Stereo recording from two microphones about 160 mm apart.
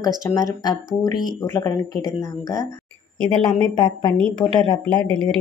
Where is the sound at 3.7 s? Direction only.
25° left (ahead or behind).